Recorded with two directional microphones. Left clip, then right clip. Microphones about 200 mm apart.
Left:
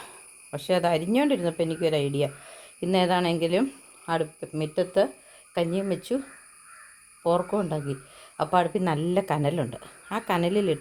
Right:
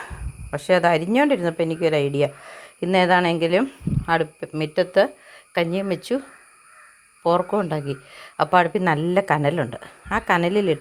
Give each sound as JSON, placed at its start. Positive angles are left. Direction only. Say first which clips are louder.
{"t": 0.0, "sound": "speech", "louder": "right 8 dB", "side_deg": -15}